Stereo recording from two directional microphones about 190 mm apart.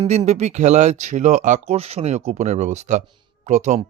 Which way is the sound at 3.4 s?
40° right (ahead or behind).